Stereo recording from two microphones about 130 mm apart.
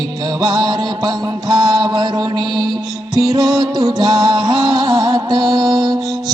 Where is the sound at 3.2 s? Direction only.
30° right (ahead or behind).